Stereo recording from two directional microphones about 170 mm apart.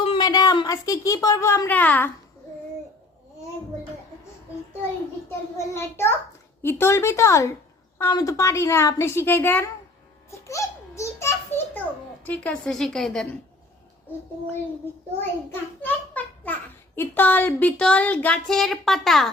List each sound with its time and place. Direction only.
0.0 s a woman's voice: 30° left (ahead or behind); by 2.0 s 10° left (ahead or behind)
5.5 s a child's voice: 15° left (ahead or behind)
10.4 s a sound: 20° left (ahead or behind)
12.2 s a woman's voice: 10° left (ahead or behind)
15.8 s a child's voice: 10° left (ahead or behind)